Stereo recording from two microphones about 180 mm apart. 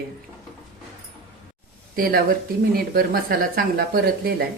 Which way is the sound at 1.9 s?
55° right (ahead or behind).